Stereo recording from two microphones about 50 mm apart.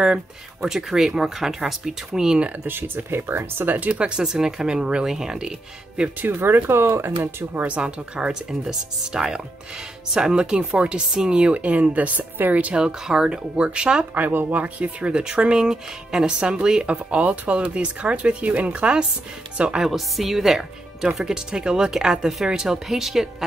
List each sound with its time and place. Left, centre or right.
0.0 s speech: centre
2.6 s speech: right
3.9 s speech: centre
6.2 s speech: right
7.6 s speech: right
12.7 s speech: centre
14.1 s speech: right
14.6 s speech: right
16.8 s speech: right
19.8 s speech: centre